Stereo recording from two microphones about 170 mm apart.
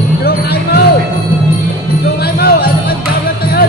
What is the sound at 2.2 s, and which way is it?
Music, 70° left (ahead or behind).